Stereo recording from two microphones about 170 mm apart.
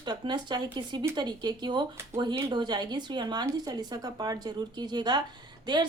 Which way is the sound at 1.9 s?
15° right (ahead or behind).